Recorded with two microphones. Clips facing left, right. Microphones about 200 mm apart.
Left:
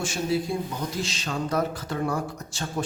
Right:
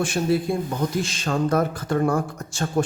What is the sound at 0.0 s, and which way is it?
A man's voice, 60° right (ahead or behind).